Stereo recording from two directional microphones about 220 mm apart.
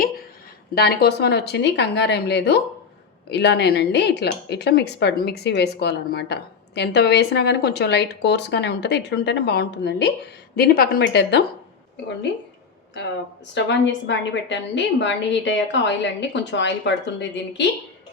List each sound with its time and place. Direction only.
0.8 s speech: 45° left (ahead or behind)
13.5 s speech: 55° left (ahead or behind)